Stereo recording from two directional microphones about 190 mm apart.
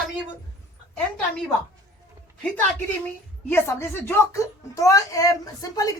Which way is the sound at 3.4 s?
10° left (ahead or behind).